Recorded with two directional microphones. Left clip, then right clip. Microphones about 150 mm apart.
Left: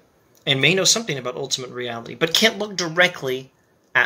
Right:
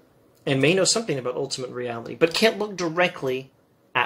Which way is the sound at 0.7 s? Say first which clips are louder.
Left 2 dB; 15° left (ahead or behind).